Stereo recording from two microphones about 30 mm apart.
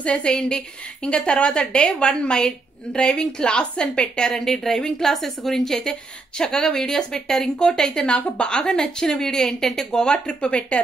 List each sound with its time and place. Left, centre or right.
0.0 s a woman's voice: left
0.3 s a woman's voice: left
3.4 s a woman's voice: left
4.3 s a woman's voice: centre
4.7 s a woman's voice: left
5.0 s a woman's voice: centre
5.8 s a woman's voice: left
8.4 s a woman's voice: left
10.4 s a woman's voice: left